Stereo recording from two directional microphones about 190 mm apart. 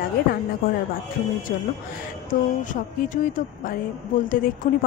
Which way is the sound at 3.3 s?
45° left (ahead or behind).